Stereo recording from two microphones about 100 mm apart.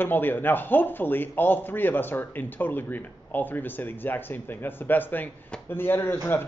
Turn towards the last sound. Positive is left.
turn(degrees=20)  # may be behind; listen again after turning